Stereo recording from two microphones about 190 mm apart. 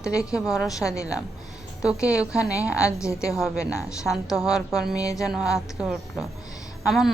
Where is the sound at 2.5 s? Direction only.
15° left (ahead or behind).